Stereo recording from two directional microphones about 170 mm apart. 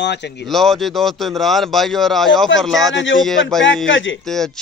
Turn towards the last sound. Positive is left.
turn(degrees=0)  # may be behind; listen again after turning